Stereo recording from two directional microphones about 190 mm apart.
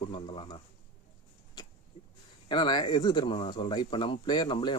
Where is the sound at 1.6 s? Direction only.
20° left (ahead or behind).